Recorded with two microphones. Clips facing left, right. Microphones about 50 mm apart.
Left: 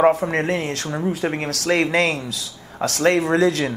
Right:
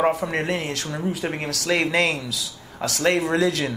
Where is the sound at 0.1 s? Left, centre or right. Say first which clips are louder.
Left 3 dB; left.